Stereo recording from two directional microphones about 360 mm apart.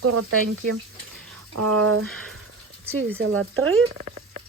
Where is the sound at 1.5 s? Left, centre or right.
Right.